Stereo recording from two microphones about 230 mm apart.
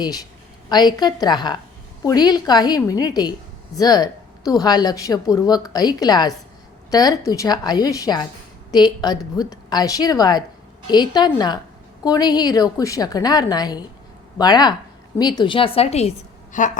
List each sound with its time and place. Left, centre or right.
0.0 s a woman's voice: centre; by 16.7 s left